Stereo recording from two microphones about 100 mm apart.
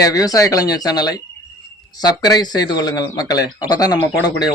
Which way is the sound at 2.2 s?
40° left (ahead or behind).